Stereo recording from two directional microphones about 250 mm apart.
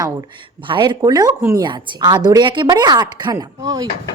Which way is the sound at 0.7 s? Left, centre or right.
Centre.